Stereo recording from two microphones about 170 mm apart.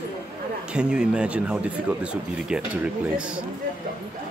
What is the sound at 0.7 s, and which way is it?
Speech, 5° right (ahead or behind).